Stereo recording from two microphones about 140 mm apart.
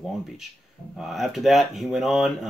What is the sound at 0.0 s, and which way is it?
Speech, centre (ahead or behind).